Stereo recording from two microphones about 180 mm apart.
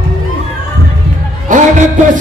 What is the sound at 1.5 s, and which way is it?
Music, 45° right (ahead or behind).